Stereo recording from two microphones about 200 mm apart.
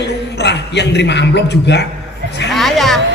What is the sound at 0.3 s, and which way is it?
A man's voice, 60° left (ahead or behind).